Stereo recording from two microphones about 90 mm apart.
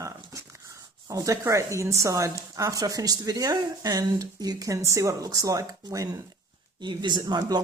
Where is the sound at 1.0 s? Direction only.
40° right (ahead or behind).